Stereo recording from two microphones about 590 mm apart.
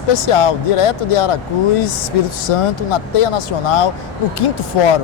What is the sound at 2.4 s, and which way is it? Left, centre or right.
Speech, left.